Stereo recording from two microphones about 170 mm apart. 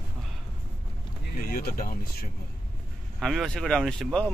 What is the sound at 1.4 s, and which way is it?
Speech, 55° left (ahead or behind).